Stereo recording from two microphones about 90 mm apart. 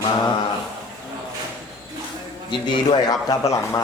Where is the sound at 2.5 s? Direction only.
50° left (ahead or behind).